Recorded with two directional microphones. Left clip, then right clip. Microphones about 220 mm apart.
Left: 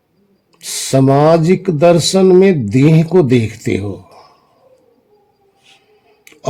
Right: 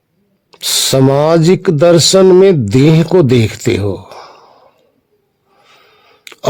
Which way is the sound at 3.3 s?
55° right (ahead or behind).